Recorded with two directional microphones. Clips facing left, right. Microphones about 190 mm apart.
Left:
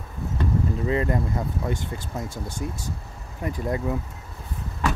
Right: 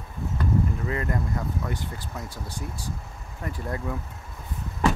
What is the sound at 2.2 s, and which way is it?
Speech, 45° left (ahead or behind).